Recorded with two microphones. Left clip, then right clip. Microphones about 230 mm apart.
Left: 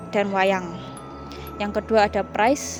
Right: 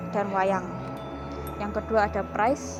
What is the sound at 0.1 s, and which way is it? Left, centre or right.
Speech, left.